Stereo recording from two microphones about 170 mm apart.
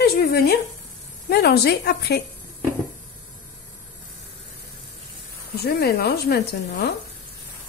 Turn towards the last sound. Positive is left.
turn(degrees=65)  # may be behind; listen again after turning